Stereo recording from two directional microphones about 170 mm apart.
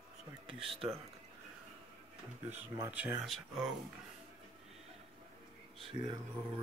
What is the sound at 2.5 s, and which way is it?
Speech, 10° right (ahead or behind).